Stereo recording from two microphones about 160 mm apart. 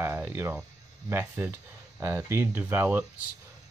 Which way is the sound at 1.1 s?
15° right (ahead or behind).